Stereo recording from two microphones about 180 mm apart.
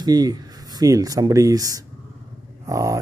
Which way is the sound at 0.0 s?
20° right (ahead or behind).